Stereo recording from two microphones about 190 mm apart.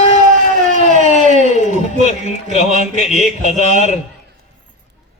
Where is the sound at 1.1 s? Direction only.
40° left (ahead or behind).